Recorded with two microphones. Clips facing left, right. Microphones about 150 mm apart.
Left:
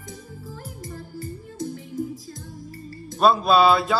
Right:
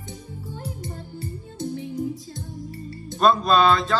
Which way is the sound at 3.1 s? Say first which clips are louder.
Left 1 dB; 5° left (ahead or behind).